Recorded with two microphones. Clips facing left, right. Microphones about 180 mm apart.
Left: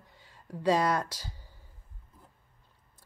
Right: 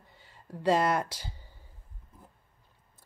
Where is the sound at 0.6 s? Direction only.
5° right (ahead or behind).